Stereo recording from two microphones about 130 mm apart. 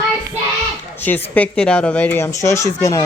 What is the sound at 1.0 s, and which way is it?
A child's voice, 15° left (ahead or behind).